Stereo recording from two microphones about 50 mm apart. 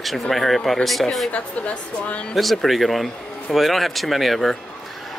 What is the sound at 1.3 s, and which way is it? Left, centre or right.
Speech, left.